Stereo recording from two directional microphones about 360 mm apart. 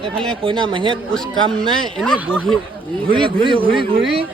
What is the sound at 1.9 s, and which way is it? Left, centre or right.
Speech, centre.